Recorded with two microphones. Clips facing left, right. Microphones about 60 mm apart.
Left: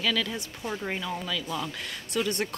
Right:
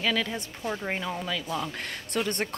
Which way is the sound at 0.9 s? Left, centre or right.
Right.